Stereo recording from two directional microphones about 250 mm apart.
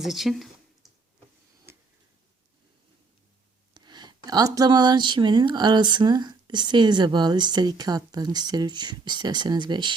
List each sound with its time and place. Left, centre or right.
0.0 s a sound: centre
1.7 s tick-tock: centre
3.8 s speech: centre